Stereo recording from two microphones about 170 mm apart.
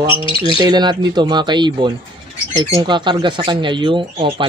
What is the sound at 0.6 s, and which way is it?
Speech, 25° right (ahead or behind).